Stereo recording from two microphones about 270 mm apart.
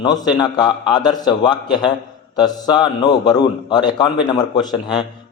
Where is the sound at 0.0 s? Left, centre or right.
Centre.